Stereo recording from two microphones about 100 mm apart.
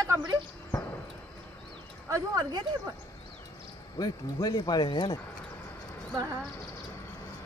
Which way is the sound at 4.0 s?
40° left (ahead or behind).